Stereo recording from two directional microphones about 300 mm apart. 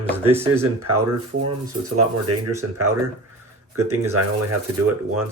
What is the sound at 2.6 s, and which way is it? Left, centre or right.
Speech, right.